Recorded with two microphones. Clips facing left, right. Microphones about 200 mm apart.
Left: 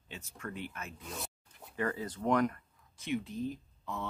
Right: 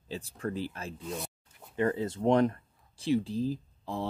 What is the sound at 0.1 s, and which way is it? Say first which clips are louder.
Speech: right 9 dB; 35° right (ahead or behind).